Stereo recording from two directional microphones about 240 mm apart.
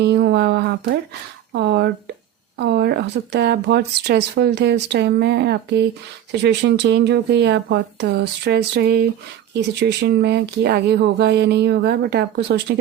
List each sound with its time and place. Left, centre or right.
0.0 s speech: right